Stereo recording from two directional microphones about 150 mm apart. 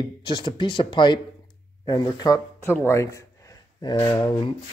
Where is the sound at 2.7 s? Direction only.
20° left (ahead or behind).